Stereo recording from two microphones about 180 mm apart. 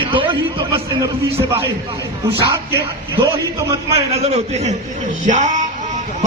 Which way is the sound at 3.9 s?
35° right (ahead or behind).